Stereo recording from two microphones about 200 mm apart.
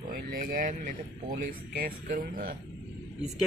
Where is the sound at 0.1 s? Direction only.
45° right (ahead or behind).